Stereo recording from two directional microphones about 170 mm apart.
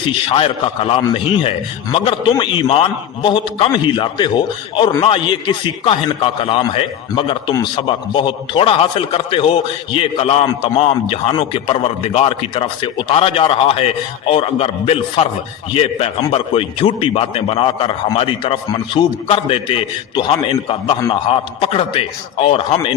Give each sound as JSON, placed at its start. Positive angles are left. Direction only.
{"t": 0.0, "sound": "a man's voice", "side_deg": 30}